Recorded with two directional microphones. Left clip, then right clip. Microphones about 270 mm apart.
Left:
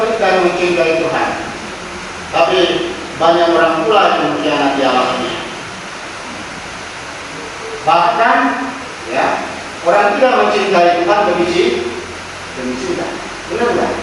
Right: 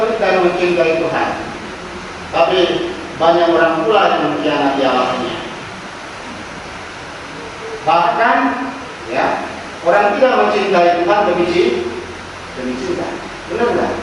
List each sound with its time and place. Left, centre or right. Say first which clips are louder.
0.0 s a man's voice: left 1 dB; centre
2.3 s a man's voice: left 1 dB; centre
7.9 s a man's voice: left 2 dB; centre
13.6 s a man's voice: left 1 dB; centre